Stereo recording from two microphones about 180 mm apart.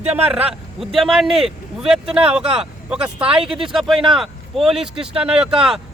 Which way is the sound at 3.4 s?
30° right (ahead or behind).